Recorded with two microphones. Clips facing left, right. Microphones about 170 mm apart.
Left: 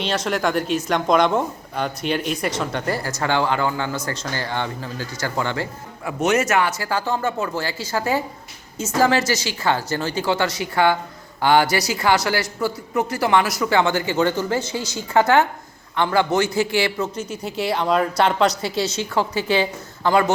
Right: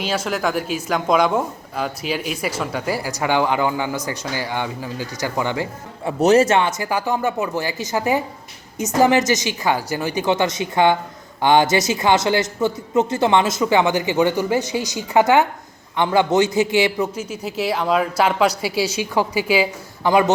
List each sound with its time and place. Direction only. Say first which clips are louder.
0.0 s speech: even; 5° right (ahead or behind)
6.1 s speech: right 5 dB; 35° right (ahead or behind); by 17.1 s 20° right (ahead or behind)
17.2 s speech: right 1 dB; 5° right (ahead or behind)